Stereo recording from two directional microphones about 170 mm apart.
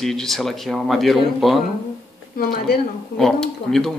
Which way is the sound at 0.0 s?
Centre (ahead or behind).